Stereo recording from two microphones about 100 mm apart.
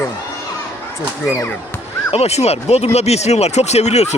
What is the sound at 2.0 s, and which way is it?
Speech, 85° left.